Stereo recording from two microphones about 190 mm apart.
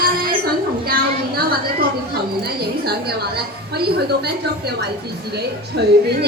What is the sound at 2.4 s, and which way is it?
A woman's voice, 55° right (ahead or behind).